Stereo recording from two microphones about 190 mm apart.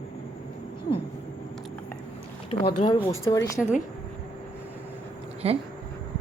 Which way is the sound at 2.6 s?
25° left (ahead or behind).